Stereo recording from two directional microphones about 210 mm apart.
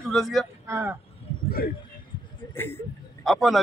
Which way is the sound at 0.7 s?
10° right (ahead or behind).